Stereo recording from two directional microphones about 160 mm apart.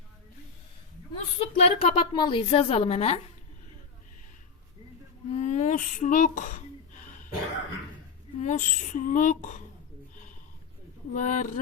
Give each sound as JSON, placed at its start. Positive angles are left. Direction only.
{"t": 1.1, "sound": "a woman's voice", "side_deg": 40}
{"t": 2.1, "sound": "a woman's voice", "side_deg": 30}
{"t": 5.4, "sound": "a sound", "side_deg": 45}
{"t": 8.4, "sound": "speech", "side_deg": 50}
{"t": 11.1, "sound": "speech", "side_deg": 55}